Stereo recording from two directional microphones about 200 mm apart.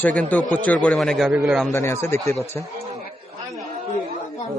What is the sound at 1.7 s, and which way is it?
Speech, 15° left (ahead or behind).